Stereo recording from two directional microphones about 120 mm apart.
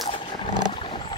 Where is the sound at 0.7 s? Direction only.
50° left (ahead or behind).